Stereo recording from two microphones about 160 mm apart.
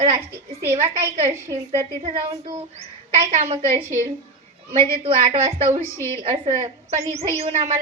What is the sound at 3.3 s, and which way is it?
Speech, 45° right (ahead or behind).